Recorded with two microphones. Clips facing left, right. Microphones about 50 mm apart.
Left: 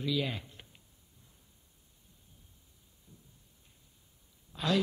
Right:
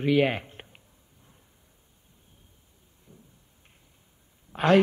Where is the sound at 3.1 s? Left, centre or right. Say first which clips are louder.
Right 6 dB; right.